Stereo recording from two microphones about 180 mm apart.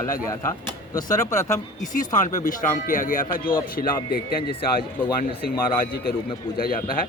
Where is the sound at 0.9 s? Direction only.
20° left (ahead or behind).